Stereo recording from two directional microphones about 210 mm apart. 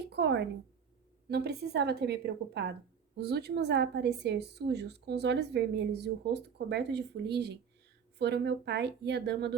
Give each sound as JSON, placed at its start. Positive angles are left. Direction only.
{"t": 0.1, "sound": "a woman's voice", "side_deg": -55}